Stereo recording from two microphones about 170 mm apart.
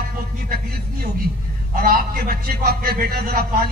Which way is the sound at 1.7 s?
60° right (ahead or behind).